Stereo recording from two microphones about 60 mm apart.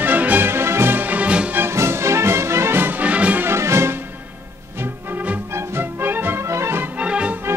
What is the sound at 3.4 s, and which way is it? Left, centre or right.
Music, right.